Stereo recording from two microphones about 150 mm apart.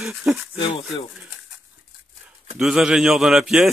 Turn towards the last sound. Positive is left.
turn(degrees=0)  # may be behind; listen again after turning